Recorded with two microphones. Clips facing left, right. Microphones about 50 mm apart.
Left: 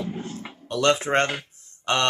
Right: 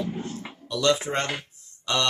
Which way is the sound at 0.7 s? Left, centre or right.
Left.